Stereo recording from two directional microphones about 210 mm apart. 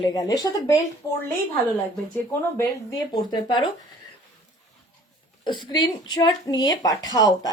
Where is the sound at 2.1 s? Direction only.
15° left (ahead or behind).